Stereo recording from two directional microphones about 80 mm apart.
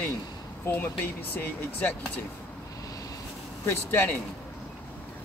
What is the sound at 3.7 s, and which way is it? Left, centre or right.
Speech, left.